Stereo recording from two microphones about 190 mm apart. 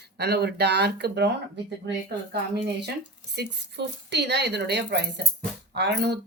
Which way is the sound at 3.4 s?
65° right (ahead or behind).